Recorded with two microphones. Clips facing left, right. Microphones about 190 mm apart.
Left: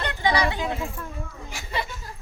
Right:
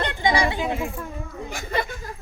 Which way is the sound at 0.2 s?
15° right (ahead or behind).